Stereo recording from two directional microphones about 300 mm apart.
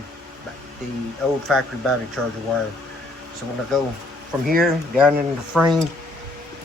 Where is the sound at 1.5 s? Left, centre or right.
Centre.